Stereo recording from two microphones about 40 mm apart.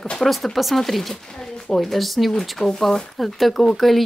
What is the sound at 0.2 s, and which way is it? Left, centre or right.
Speech, centre.